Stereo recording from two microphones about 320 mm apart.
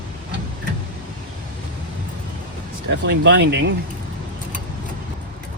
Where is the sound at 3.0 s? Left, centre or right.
Right.